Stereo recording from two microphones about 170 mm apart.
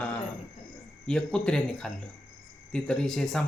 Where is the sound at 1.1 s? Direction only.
5° left (ahead or behind).